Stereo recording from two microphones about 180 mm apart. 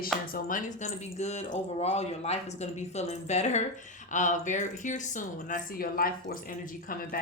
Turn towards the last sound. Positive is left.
turn(degrees=55)  # may be behind; listen again after turning